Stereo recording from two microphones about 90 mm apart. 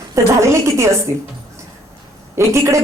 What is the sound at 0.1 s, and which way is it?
Speech, 35° right (ahead or behind).